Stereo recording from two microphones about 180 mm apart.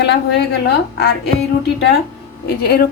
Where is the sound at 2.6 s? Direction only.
60° left (ahead or behind).